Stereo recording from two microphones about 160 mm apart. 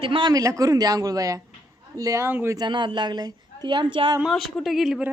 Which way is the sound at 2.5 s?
30° right (ahead or behind).